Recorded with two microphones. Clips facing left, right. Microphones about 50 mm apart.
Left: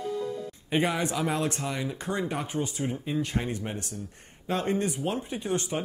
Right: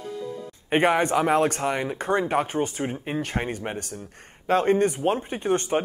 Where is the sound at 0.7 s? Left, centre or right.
Right.